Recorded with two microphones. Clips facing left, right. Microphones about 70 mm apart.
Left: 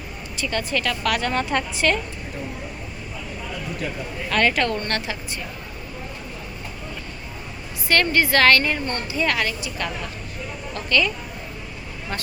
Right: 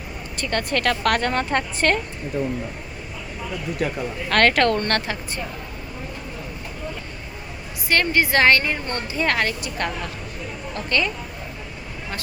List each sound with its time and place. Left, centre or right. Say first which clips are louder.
0.3 s a woman's voice: right 1 dB; right
3.8 s a woman's voice: right 7 dB; right
7.9 s a woman's voice: even; centre
9.1 s speech: right 1 dB; right
10.8 s speech: left 2 dB; right